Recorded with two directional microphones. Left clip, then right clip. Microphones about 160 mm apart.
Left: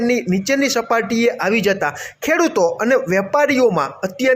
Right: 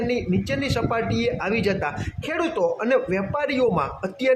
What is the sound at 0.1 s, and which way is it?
A man's voice, 30° left (ahead or behind).